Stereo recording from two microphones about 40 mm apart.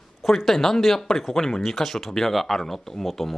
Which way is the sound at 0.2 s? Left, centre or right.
Centre.